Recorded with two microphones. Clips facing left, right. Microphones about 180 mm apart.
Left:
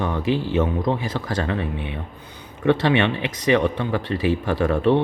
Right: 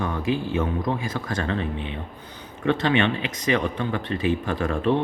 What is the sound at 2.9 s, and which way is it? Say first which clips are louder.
Speech: left 2 dB; 20° left (ahead or behind).